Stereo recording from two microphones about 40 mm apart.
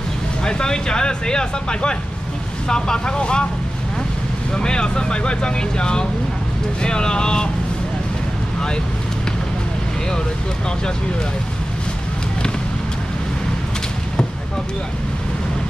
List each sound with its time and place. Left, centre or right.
0.4 s speech: left
4.6 s speech: left